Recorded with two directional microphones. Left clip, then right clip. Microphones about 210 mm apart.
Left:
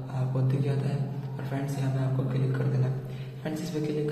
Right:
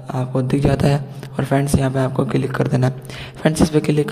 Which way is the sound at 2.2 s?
55° right (ahead or behind).